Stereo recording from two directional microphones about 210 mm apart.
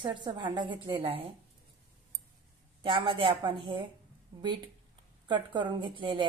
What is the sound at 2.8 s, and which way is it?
A woman's voice, 25° right (ahead or behind).